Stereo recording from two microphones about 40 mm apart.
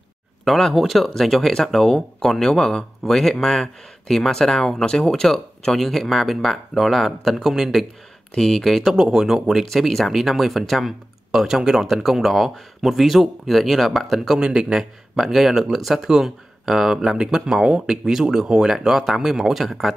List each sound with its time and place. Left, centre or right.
0.5 s speech: centre
8.4 s speech: centre
8.9 s speech: centre
14.4 s a man's voice: right
15.1 s speech: centre